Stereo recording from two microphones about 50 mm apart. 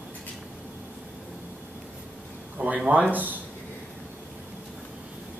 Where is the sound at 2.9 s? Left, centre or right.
Right.